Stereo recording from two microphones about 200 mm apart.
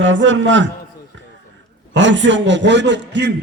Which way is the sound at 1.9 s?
65° right (ahead or behind).